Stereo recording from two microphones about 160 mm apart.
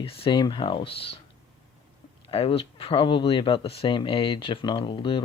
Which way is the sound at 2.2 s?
35° left (ahead or behind).